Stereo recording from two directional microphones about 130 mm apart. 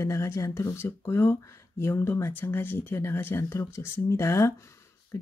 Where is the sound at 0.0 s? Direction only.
25° left (ahead or behind).